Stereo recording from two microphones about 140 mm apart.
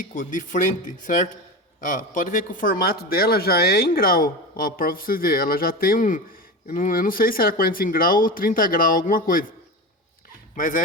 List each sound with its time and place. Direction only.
0.1 s a man's voice: 65° left (ahead or behind); by 9.5 s 90° left
10.5 s speech: 70° left (ahead or behind)